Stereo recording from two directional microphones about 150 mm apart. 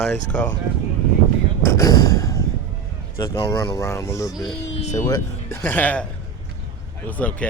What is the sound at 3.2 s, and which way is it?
Speech, 20° left (ahead or behind).